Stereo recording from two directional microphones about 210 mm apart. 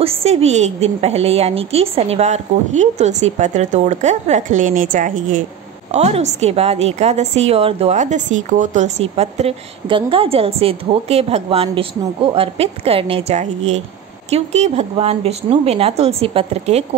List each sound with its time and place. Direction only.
0.0 s a woman's voice: 30° right (ahead or behind)